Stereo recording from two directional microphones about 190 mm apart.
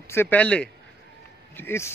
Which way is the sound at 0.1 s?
10° left (ahead or behind).